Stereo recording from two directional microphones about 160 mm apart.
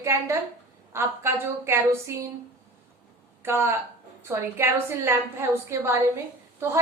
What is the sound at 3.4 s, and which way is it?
A woman's voice, 15° right (ahead or behind).